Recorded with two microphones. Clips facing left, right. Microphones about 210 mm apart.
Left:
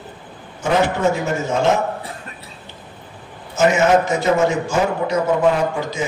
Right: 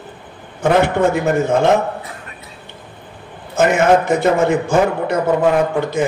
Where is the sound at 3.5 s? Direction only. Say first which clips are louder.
Right 2 dB; 55° right (ahead or behind).